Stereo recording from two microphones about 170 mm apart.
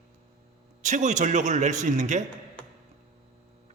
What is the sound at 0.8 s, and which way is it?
A man's voice, 45° right (ahead or behind).